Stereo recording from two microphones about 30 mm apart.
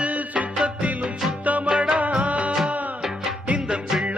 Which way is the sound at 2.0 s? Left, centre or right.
Right.